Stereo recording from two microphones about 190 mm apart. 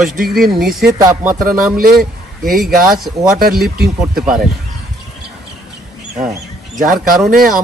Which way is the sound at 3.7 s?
55° right (ahead or behind).